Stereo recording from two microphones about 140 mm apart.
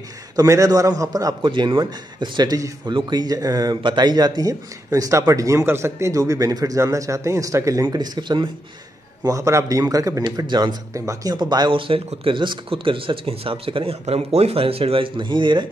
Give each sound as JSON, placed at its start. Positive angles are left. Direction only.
{"t": 0.4, "sound": "a man's voice", "side_deg": -25}